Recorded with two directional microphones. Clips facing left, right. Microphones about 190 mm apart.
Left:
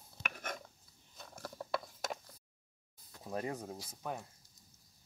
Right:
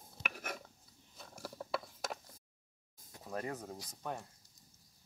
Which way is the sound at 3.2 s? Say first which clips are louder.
Left 2 dB; 15° left (ahead or behind).